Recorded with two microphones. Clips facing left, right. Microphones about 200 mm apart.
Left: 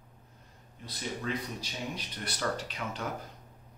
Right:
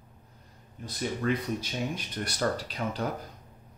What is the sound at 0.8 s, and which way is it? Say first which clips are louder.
Speech: right 6 dB; 55° right (ahead or behind).